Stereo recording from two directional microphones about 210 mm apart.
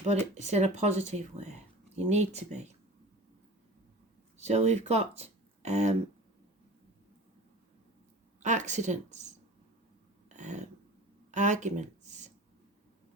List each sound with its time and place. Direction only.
0.3 s speech: 35° right (ahead or behind)
4.4 s speech: 30° right (ahead or behind)
8.4 s speech: 35° right (ahead or behind)
10.2 s a sound: 35° right (ahead or behind)